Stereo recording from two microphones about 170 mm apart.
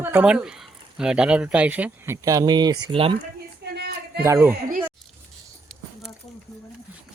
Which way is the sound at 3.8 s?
70° right (ahead or behind).